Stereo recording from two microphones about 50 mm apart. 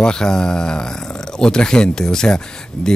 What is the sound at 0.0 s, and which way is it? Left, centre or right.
Speech, centre.